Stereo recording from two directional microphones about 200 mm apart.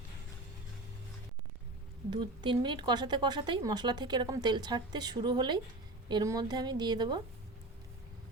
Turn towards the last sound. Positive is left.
turn(degrees=-20)  # may be behind; listen again after turning